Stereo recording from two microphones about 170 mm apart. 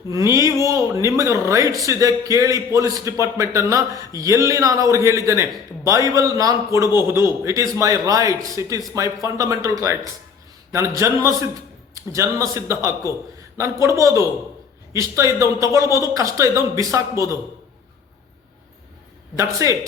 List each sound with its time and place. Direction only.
0.1 s a man's voice: 20° right (ahead or behind)
19.4 s a man's voice: 20° right (ahead or behind)